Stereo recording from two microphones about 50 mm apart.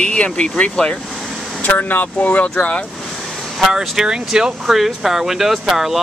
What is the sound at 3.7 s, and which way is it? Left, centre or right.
Speech, centre.